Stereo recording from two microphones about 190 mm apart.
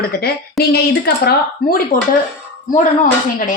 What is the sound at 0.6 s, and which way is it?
A woman's voice, 60° left (ahead or behind).